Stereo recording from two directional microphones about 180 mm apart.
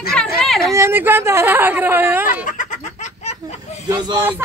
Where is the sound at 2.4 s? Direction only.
45° left (ahead or behind).